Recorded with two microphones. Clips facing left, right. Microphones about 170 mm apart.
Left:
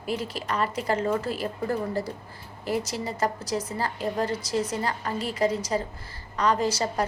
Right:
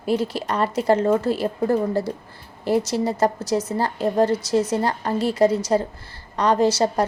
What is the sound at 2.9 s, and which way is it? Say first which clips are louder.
Speech: right 10 dB; 45° right (ahead or behind).